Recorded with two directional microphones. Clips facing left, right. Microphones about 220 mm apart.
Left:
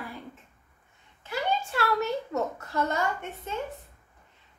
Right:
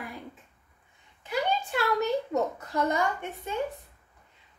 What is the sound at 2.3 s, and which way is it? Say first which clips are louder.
Speech: right 2 dB; 15° right (ahead or behind).